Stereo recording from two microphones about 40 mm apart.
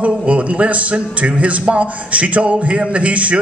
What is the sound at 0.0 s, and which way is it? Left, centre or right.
A man's voice, right.